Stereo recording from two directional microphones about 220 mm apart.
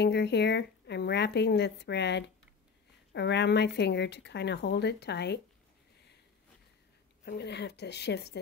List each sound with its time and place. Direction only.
0.0 s speech: 50° left (ahead or behind)
7.2 s speech: 50° left (ahead or behind)